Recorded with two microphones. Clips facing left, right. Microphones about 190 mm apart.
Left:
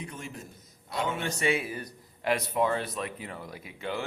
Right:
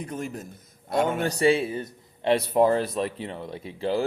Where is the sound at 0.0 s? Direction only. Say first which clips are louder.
Right 8 dB; 45° right (ahead or behind).